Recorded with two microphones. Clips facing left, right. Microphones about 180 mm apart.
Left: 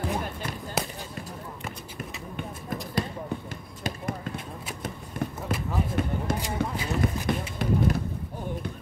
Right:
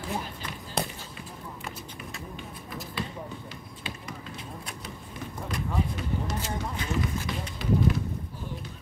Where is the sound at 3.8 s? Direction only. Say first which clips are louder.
Left 9 dB; 50° left (ahead or behind).